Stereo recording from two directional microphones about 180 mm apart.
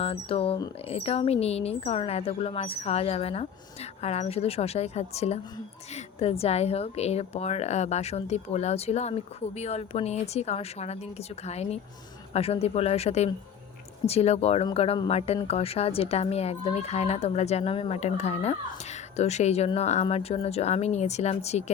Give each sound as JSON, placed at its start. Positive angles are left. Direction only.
{"t": 0.0, "sound": "speech", "side_deg": 30}